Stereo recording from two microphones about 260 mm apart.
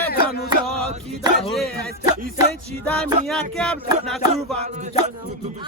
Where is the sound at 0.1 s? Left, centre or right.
Left.